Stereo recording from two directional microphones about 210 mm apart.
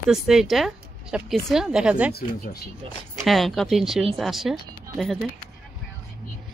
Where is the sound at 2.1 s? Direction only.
50° left (ahead or behind).